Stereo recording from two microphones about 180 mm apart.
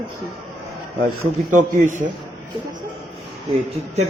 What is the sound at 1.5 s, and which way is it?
Speech, 45° right (ahead or behind).